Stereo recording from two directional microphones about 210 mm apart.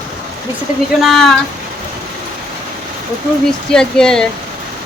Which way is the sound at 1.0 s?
Centre (ahead or behind).